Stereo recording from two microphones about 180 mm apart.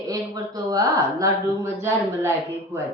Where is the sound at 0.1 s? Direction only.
20° right (ahead or behind).